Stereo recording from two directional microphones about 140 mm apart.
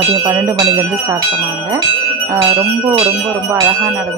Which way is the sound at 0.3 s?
20° right (ahead or behind).